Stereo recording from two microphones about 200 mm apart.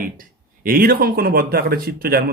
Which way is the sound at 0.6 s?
45° right (ahead or behind).